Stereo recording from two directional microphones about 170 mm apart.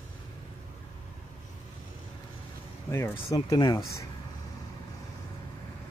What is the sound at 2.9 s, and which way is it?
Speech, 15° left (ahead or behind).